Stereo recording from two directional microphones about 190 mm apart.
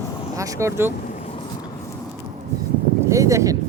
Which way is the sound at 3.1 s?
15° right (ahead or behind).